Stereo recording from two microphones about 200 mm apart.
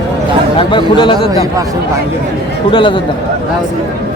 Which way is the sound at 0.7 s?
25° left (ahead or behind).